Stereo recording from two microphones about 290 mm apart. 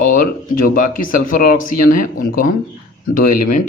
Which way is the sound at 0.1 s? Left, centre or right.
Left.